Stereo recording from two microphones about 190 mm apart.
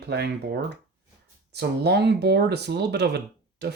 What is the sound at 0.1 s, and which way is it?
Speech, 60° right (ahead or behind).